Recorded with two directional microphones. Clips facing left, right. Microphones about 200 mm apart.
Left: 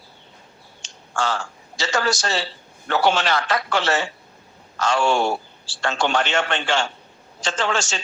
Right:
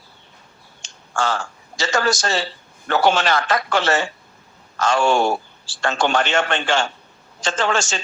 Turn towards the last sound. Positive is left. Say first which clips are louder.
# right 3 dB
turn(degrees=-50)  # may be behind; listen again after turning